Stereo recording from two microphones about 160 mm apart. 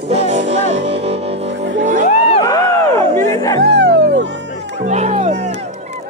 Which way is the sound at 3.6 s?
90° right.